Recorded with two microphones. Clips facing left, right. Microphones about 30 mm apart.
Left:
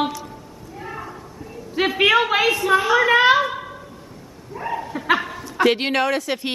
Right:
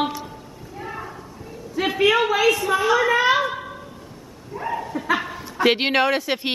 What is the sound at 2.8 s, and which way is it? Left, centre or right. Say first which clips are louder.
Speech: left 1 dB; centre.